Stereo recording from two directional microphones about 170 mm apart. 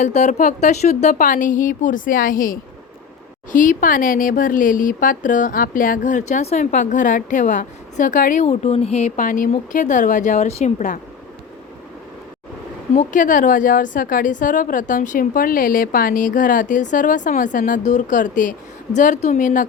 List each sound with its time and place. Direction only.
0.0 s speech: 45° left (ahead or behind)
12.9 s speech: 50° left (ahead or behind)